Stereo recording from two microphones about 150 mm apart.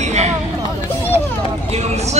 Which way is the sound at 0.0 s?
50° right (ahead or behind).